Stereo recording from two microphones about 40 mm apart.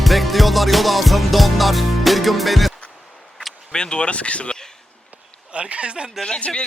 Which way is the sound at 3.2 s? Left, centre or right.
Centre.